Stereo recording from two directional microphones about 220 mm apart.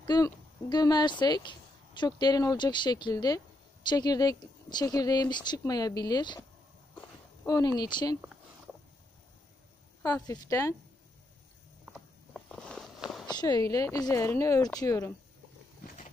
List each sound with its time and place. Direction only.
0.0 s speech: 20° left (ahead or behind)
7.0 s a sound: 15° left (ahead or behind)
10.0 s speech: 15° left (ahead or behind)
11.9 s walk: 5° left (ahead or behind)
13.3 s speech: 20° left (ahead or behind)